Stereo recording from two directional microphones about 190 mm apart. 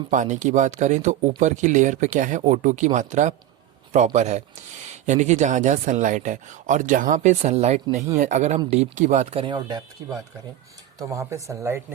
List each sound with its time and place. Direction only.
0.1 s speech: 40° right (ahead or behind); by 9.8 s 20° right (ahead or behind)
11.1 s speech: 15° right (ahead or behind)